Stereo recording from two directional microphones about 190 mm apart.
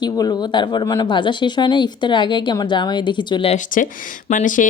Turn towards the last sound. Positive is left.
turn(degrees=45)  # may be behind; listen again after turning